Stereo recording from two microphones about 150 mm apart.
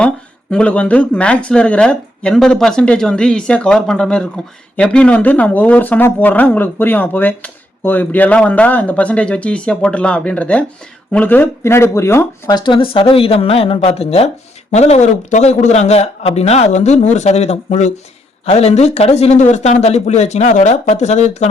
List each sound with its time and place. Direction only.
0.5 s a man's voice: 10° left (ahead or behind); by 21.4 s 50° left (ahead or behind)